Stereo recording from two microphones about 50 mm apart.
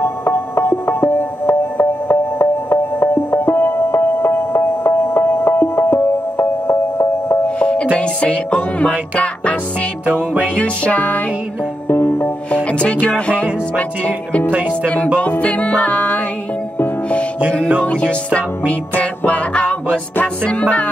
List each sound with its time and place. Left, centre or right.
0.0 s music: left
7.4 s music: left
11.9 s music: left
13.0 s music: left
17.8 s music: left
20.4 s music: left